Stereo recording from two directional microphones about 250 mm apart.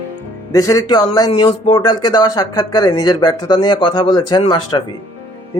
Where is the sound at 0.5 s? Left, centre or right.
Centre.